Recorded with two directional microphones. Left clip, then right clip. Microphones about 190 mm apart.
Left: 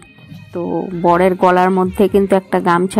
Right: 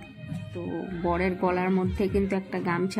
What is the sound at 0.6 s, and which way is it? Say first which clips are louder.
Speech: left 14 dB; 35° left (ahead or behind).